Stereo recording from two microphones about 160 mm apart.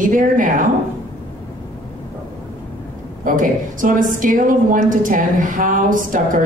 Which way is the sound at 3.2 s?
55° right (ahead or behind).